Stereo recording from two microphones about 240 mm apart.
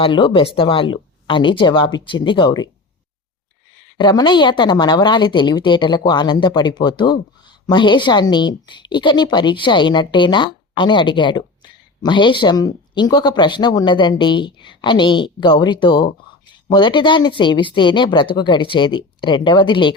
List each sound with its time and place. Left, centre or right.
0.0 s a woman's voice: left
3.9 s a woman's voice: centre